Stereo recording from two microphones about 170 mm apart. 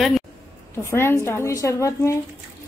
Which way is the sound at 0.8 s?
15° left (ahead or behind).